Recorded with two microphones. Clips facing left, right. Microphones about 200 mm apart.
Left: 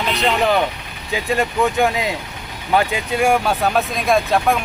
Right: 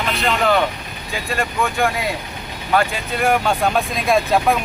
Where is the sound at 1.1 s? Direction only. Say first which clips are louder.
Left 4 dB; 20° left (ahead or behind).